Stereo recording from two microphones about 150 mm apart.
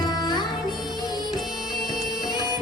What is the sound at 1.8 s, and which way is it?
Music, centre (ahead or behind).